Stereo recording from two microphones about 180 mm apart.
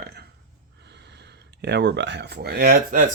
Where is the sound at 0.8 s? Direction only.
70° right (ahead or behind); by 3.0 s 50° right (ahead or behind).